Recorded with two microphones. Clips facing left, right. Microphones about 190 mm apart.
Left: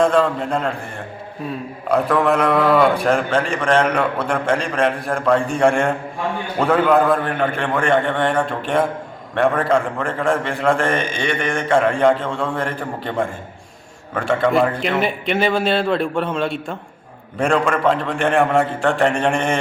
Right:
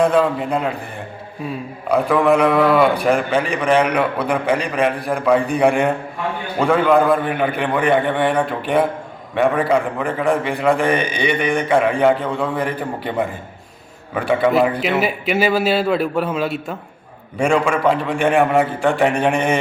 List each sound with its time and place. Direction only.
0.0 s a man's voice: 5° right (ahead or behind)
1.9 s a man's voice: centre (ahead or behind)